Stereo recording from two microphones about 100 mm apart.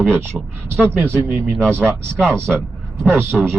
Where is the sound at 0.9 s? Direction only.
20° right (ahead or behind).